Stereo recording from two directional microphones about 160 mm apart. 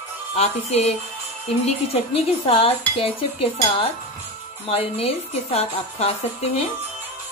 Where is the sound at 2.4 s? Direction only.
35° left (ahead or behind).